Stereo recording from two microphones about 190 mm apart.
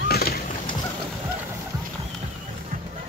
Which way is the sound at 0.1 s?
55° left (ahead or behind).